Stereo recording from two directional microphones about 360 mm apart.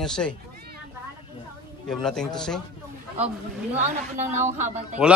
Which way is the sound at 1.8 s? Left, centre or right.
Centre.